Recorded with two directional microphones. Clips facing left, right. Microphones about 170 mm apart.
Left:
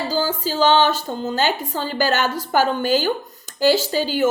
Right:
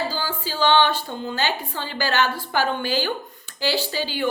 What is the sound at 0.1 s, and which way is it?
A woman's voice, 40° left (ahead or behind).